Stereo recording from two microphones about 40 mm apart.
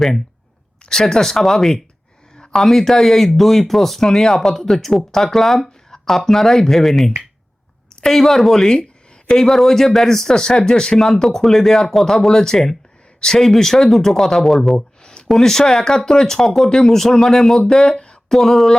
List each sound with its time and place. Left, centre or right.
0.9 s speech: centre
18.3 s speech: centre